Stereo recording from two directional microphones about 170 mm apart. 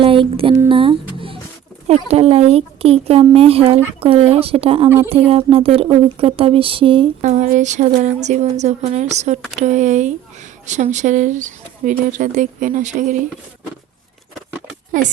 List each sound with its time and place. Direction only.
0.0 s speech: 30° right (ahead or behind)
0.7 s a sound: 30° right (ahead or behind)
1.9 s speech: 35° right (ahead or behind)
7.2 s a woman's voice: 45° right (ahead or behind)
15.0 s speech: 50° right (ahead or behind)